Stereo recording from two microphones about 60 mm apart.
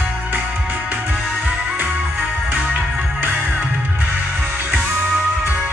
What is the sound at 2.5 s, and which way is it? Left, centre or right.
Music, right.